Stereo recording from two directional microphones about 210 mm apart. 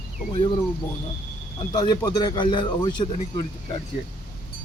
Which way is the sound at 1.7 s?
20° left (ahead or behind).